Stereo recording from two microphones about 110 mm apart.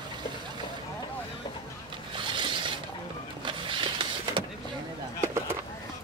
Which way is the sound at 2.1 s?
45° right (ahead or behind).